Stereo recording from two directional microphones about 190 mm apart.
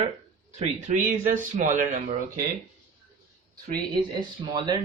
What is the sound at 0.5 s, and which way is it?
Speech, 35° right (ahead or behind).